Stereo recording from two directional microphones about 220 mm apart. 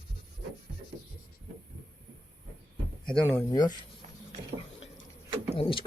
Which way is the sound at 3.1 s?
5° left (ahead or behind).